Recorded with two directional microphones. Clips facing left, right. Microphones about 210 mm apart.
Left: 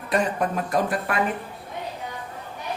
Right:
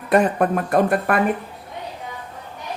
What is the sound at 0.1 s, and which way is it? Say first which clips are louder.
Speech: right 6 dB; 55° right (ahead or behind).